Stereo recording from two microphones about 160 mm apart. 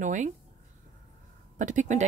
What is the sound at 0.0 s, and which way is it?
Speech, 50° right (ahead or behind).